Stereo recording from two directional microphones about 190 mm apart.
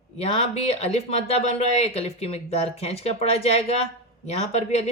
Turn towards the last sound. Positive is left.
turn(degrees=35)  # may be behind; listen again after turning